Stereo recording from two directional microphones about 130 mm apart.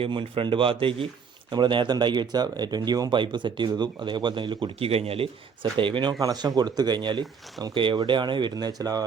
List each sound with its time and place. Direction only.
0.0 s speech: 40° right (ahead or behind)